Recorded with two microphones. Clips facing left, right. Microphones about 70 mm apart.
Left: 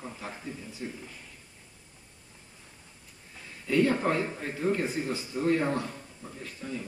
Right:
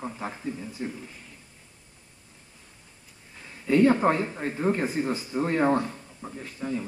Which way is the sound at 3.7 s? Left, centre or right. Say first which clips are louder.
Right 5 dB; right.